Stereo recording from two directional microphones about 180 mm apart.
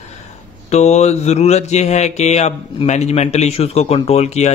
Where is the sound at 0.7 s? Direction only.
40° left (ahead or behind).